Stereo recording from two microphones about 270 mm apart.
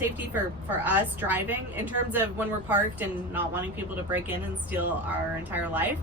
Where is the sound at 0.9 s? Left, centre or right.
Centre.